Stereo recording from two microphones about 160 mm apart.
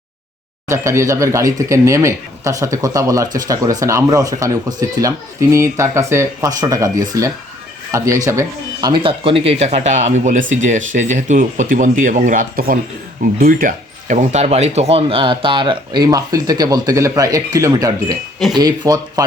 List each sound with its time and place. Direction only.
0.7 s speech: 20° right (ahead or behind); by 9.4 s 35° right (ahead or behind)
9.6 s speech: 45° right (ahead or behind); by 19.2 s 25° right (ahead or behind)